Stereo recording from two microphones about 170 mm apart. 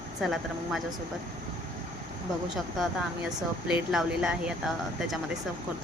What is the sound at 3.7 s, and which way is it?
Speech, 5° right (ahead or behind).